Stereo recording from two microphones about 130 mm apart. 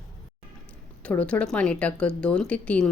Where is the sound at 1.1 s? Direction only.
10° left (ahead or behind).